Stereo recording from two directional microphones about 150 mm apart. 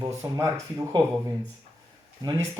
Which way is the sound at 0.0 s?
20° right (ahead or behind).